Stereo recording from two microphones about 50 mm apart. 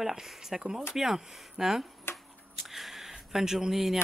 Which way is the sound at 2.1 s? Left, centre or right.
Left.